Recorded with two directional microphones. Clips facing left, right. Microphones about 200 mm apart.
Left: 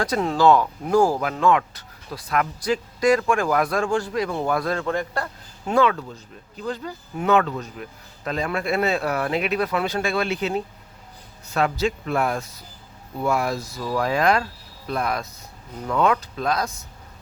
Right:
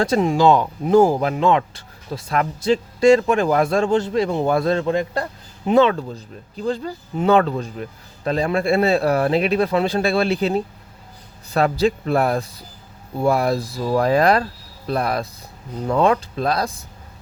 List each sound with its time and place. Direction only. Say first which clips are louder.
0.0 s speech: right 3 dB; 25° right (ahead or behind)
5.9 s speech: right 5 dB; 35° right (ahead or behind)